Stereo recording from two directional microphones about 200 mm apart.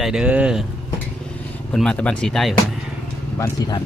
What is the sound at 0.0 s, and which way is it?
Speech, 5° right (ahead or behind).